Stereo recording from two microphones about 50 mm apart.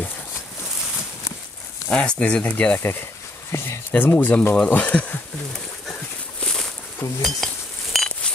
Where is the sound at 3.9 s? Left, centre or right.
Left.